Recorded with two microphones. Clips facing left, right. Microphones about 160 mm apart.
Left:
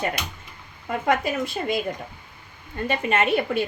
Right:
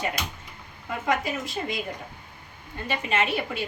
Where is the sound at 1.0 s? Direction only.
60° left (ahead or behind).